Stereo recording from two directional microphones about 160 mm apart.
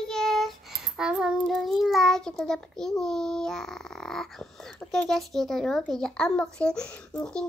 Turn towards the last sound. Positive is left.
turn(degrees=5)  # may be behind; listen again after turning